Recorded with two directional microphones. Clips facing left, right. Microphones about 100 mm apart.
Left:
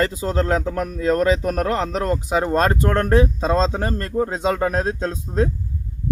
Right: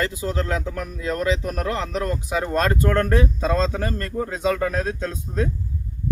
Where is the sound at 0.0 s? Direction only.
35° left (ahead or behind).